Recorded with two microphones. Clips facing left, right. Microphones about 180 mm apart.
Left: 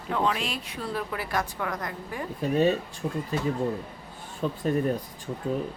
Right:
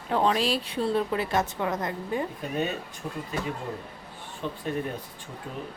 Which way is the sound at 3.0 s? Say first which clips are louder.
Left 5 dB; 20° left (ahead or behind).